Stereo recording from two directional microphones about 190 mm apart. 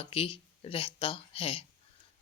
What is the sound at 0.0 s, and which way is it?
Speech, 30° left (ahead or behind).